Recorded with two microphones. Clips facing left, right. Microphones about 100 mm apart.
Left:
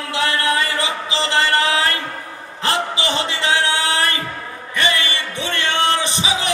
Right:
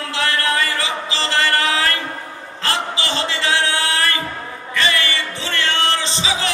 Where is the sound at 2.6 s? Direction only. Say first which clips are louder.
Left 2 dB; 20° left (ahead or behind).